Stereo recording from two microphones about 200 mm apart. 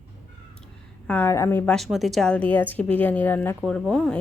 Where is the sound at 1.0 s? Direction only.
10° left (ahead or behind).